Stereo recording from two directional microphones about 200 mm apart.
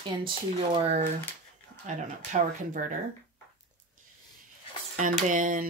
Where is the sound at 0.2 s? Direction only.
25° right (ahead or behind).